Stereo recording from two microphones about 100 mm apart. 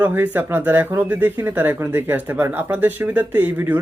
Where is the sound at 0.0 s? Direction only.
20° right (ahead or behind).